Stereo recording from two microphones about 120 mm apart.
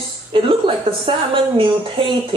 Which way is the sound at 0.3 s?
45° right (ahead or behind).